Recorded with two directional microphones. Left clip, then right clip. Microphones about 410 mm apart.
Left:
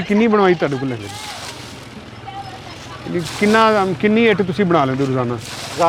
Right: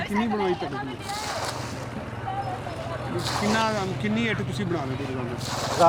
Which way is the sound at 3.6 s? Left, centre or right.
Left.